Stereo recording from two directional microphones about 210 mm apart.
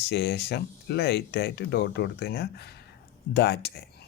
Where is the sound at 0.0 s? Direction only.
50° left (ahead or behind).